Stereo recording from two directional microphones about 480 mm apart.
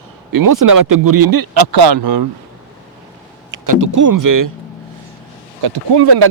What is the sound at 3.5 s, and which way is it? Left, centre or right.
Speech, right.